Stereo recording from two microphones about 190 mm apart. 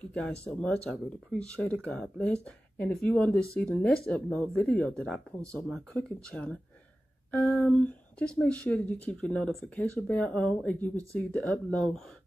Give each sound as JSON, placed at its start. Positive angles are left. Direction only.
{"t": 0.1, "sound": "speech", "side_deg": 5}